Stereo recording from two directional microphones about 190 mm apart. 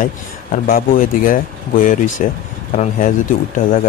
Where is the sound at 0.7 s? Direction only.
45° left (ahead or behind).